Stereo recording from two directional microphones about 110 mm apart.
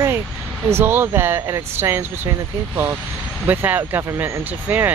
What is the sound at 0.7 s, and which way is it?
Speech, 20° right (ahead or behind).